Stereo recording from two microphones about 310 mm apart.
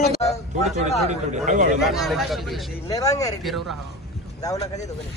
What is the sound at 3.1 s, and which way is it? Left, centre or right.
Speech, centre.